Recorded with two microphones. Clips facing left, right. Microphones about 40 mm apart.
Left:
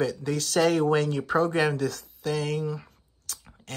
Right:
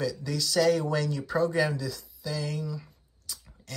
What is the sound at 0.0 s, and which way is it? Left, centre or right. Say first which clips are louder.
Speech: left 3 dB; left.